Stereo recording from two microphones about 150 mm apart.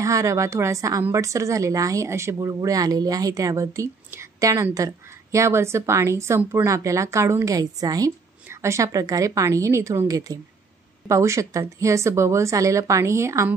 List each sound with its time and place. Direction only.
0.0 s a woman's voice: 20° right (ahead or behind)